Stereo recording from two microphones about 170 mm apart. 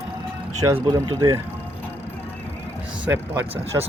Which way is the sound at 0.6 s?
15° right (ahead or behind).